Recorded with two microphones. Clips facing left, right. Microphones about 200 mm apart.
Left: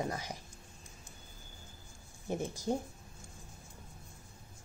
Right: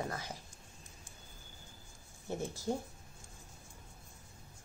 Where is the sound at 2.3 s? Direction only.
15° left (ahead or behind).